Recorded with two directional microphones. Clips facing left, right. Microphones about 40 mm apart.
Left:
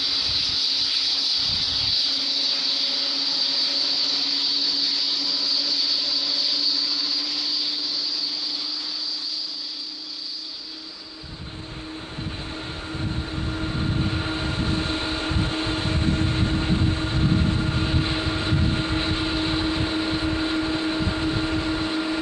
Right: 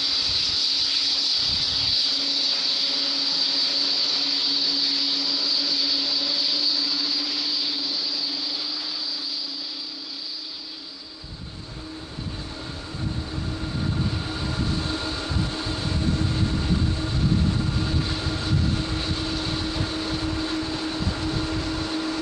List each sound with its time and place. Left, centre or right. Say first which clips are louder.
0.0 s vehicle: even; centre
13.5 s train: left 2 dB; left